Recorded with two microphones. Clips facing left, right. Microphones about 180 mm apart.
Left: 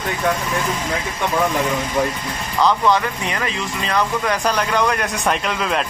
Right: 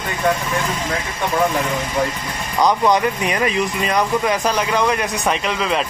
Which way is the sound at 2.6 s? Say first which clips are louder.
Right 1 dB; 15° right (ahead or behind).